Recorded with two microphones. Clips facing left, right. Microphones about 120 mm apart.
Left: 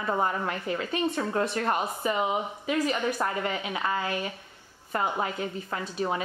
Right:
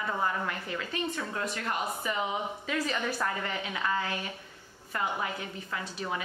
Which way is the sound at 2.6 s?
15° left (ahead or behind).